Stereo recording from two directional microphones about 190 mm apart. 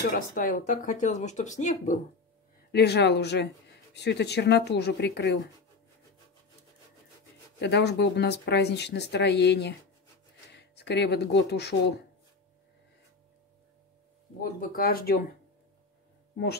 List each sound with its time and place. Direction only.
0.0 s speech: 45° left (ahead or behind)
2.7 s speech: 60° left (ahead or behind)
7.5 s speech: 65° left (ahead or behind)
14.4 s speech: 50° left (ahead or behind)